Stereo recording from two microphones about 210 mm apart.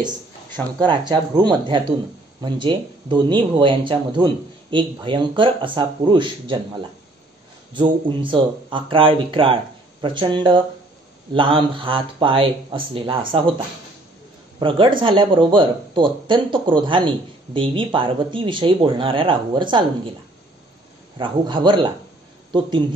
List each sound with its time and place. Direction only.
0.7 s speech: 20° right (ahead or behind)
14.6 s speech: 25° right (ahead or behind)
21.2 s speech: 20° right (ahead or behind)